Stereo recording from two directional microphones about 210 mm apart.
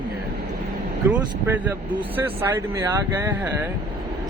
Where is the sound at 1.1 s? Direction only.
10° right (ahead or behind).